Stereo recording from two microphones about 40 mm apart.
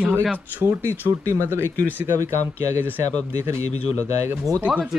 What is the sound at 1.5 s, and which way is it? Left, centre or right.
Speech, right.